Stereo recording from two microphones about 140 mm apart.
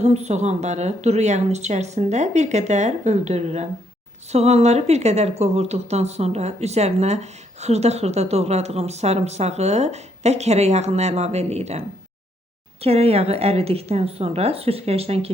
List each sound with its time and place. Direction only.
0.0 s a woman's voice: 50° right (ahead or behind)
12.8 s a woman's voice: 45° right (ahead or behind)